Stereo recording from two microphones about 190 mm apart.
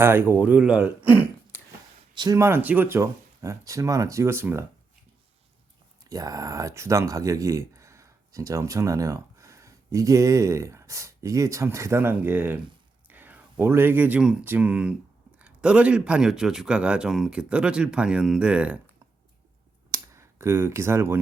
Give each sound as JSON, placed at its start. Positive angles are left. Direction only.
{"t": 0.0, "sound": "speech", "side_deg": -10}
{"t": 2.1, "sound": "speech", "side_deg": -20}
{"t": 6.1, "sound": "a man's voice", "side_deg": -20}
{"t": 19.9, "sound": "clicking", "side_deg": -15}